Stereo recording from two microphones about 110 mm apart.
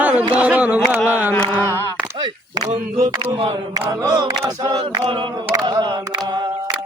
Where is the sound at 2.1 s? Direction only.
40° right (ahead or behind).